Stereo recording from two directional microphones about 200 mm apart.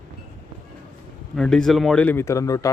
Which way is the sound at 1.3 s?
5° left (ahead or behind).